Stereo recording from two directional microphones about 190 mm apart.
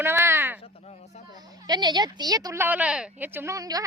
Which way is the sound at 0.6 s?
35° left (ahead or behind).